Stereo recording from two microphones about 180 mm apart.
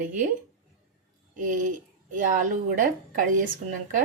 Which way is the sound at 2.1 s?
50° right (ahead or behind).